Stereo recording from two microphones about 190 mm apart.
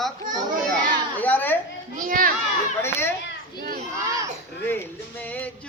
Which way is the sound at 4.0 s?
15° right (ahead or behind).